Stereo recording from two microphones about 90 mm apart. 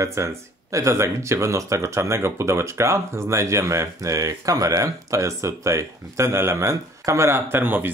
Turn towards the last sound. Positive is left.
turn(degrees=-20)  # may be behind; listen again after turning